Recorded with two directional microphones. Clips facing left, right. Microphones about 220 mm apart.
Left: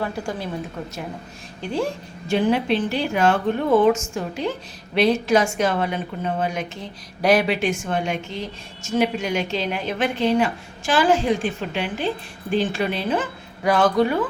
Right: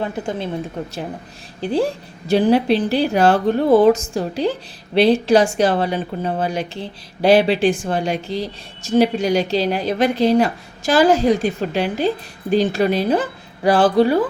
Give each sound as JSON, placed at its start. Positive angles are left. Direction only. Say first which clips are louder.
{"t": 0.0, "sound": "a woman's voice", "louder": "right 3 dB", "side_deg": -20}
{"t": 1.6, "sound": "a woman's voice", "louder": "right 5 dB", "side_deg": -35}